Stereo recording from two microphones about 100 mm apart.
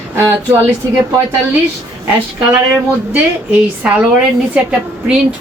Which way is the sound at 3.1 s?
10° right (ahead or behind).